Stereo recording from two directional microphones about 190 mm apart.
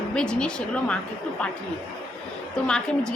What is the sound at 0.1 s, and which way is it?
Speech, 5° left (ahead or behind).